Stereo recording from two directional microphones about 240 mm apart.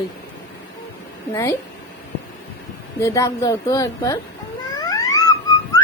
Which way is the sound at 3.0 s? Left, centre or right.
Centre.